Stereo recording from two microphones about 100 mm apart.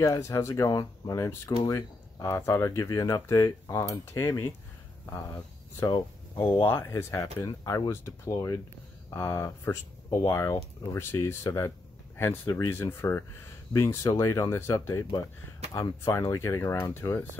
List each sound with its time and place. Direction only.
0.0 s speech: 30° left (ahead or behind)
6.6 s speech: 25° left (ahead or behind)